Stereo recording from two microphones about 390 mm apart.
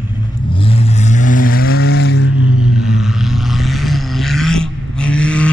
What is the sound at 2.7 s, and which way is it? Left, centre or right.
Vehicle, centre.